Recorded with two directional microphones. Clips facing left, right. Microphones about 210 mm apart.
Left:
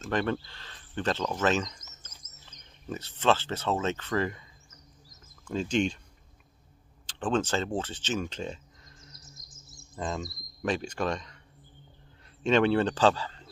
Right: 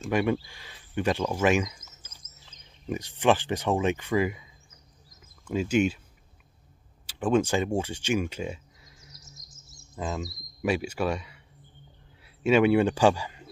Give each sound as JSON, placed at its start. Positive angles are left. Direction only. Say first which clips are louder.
{"t": 0.1, "sound": "speech", "louder": "right 3 dB", "side_deg": -10}
{"t": 5.5, "sound": "speech", "louder": "right 3 dB", "side_deg": -10}
{"t": 7.1, "sound": "speech", "louder": "right 4 dB", "side_deg": -10}
{"t": 9.2, "sound": "bird", "louder": "even", "side_deg": 55}
{"t": 9.9, "sound": "speech", "louder": "right 1 dB", "side_deg": -5}
{"t": 12.4, "sound": "speech", "louder": "right 3 dB", "side_deg": -10}